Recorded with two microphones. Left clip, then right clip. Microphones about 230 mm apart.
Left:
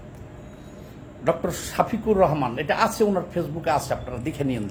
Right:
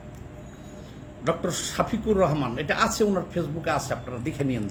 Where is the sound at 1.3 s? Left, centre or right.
Left.